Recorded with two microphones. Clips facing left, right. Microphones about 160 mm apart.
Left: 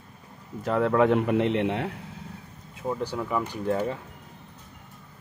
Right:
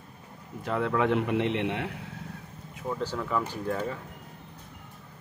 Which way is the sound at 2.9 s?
15° left (ahead or behind).